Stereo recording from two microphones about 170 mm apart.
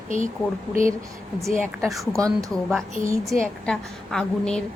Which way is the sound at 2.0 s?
20° right (ahead or behind).